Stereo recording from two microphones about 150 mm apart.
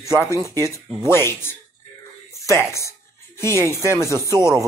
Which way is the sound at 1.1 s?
15° left (ahead or behind).